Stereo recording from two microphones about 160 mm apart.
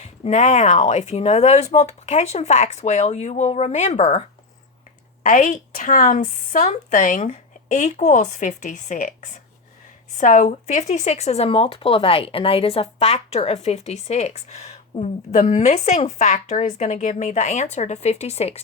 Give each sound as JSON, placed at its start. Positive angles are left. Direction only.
{"t": 0.0, "sound": "speech", "side_deg": 45}
{"t": 5.2, "sound": "speech", "side_deg": 55}